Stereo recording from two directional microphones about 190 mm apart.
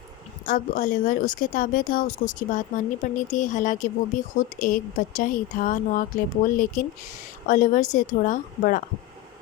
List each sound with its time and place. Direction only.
0.4 s a woman's voice: 45° left (ahead or behind)